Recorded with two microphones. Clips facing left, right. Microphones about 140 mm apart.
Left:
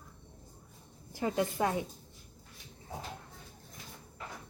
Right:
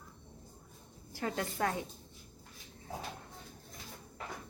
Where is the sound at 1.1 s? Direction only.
20° left (ahead or behind).